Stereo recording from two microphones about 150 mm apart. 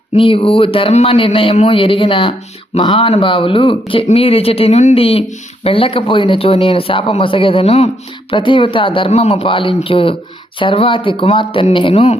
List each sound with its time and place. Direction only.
0.1 s speech: 35° left (ahead or behind)